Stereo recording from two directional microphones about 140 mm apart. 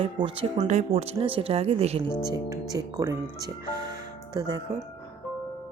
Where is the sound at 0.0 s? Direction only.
40° right (ahead or behind).